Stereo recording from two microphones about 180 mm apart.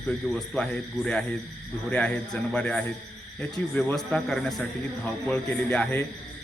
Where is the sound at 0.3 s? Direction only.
5° left (ahead or behind).